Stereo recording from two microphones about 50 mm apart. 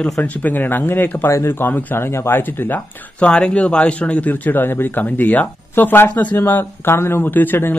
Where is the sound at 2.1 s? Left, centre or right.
Left.